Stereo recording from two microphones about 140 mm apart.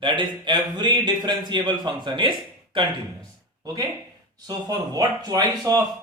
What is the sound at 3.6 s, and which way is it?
Speech, 25° right (ahead or behind).